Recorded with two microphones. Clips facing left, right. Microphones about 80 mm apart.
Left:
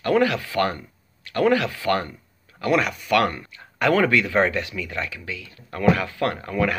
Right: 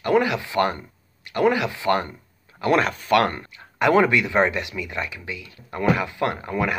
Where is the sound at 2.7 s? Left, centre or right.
Right.